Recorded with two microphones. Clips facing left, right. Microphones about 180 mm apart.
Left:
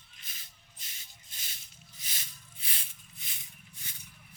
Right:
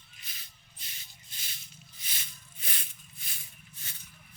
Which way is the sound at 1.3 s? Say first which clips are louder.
Right 2 dB; 45° left (ahead or behind).